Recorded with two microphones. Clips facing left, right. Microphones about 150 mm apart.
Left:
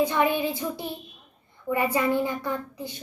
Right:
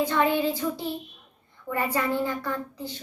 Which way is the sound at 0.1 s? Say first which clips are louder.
Right 1 dB; 15° left (ahead or behind).